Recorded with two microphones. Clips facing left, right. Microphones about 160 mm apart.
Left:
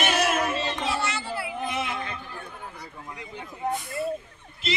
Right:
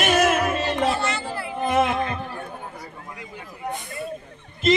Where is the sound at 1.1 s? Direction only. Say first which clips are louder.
Right 2 dB; 5° left (ahead or behind).